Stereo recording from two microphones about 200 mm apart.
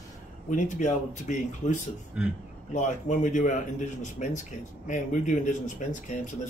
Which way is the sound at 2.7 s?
40° left (ahead or behind).